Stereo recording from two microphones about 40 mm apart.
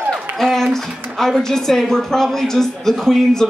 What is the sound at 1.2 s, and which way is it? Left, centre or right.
A woman's voice, centre.